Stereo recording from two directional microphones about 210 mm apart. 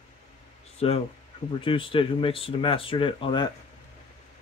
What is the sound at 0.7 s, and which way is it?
Speech, 30° left (ahead or behind).